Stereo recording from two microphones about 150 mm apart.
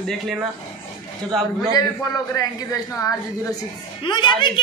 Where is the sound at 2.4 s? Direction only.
25° left (ahead or behind).